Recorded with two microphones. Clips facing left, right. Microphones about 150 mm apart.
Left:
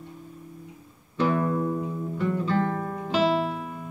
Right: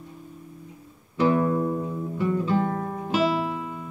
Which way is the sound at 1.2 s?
15° right (ahead or behind).